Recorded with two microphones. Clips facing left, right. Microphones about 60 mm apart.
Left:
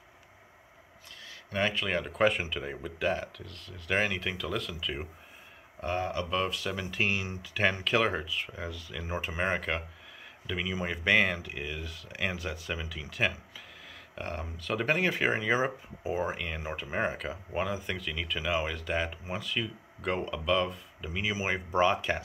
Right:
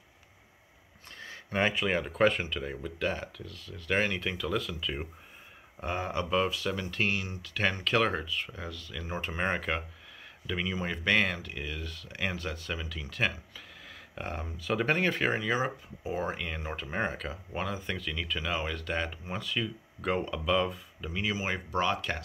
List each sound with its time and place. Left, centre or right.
1.1 s a sound: right
1.6 s speech: centre
1.9 s speech: centre
5.8 s speech: centre